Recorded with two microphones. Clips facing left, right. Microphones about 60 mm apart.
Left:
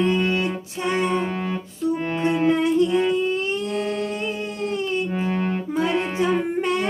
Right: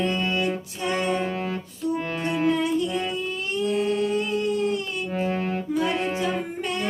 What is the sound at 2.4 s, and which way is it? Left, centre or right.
Music, left.